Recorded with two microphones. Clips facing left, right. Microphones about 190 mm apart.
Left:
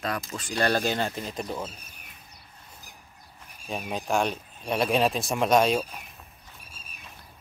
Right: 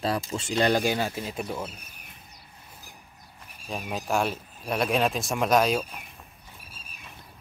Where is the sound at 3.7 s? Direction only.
Centre (ahead or behind).